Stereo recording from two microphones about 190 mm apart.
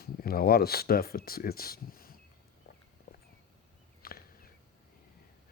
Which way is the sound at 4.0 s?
50° left (ahead or behind).